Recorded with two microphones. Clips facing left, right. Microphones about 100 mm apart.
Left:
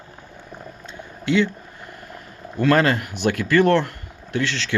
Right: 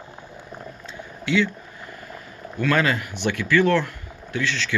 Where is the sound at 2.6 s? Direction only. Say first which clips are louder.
Left 4 dB; 45° left (ahead or behind).